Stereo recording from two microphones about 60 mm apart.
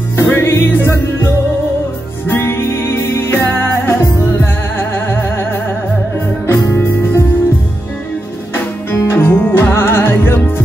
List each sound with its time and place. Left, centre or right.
0.1 s music: left
8.9 s music: left